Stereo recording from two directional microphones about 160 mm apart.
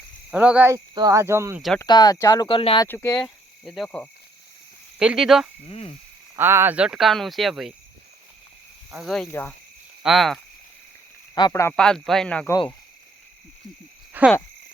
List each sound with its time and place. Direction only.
0.3 s speech: 5° right (ahead or behind)
0.9 s speech: 20° right (ahead or behind)
1.8 s speech: 25° left (ahead or behind)
2.8 s speech: 15° left (ahead or behind)
3.2 s speech: centre (ahead or behind)
5.6 s speech: 40° left (ahead or behind)
6.3 s speech: 15° right (ahead or behind)
9.0 s speech: centre (ahead or behind)
11.3 s speech: 25° left (ahead or behind)
11.8 s speech: 5° left (ahead or behind)
14.1 s speech: 10° right (ahead or behind)